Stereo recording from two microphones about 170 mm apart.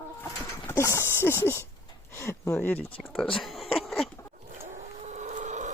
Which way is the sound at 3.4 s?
Centre (ahead or behind).